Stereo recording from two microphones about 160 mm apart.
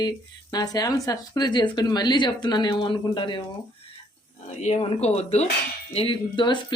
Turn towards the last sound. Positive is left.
turn(degrees=30)  # may be behind; listen again after turning